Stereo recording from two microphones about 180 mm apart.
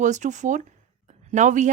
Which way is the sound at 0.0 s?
40° right (ahead or behind).